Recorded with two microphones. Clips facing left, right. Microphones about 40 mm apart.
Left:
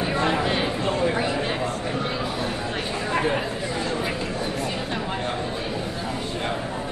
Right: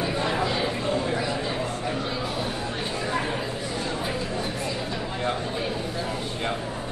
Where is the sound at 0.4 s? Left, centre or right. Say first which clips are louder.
Left 2 dB; left.